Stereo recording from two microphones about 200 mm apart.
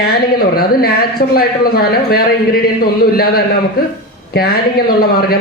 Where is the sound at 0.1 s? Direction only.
50° left (ahead or behind).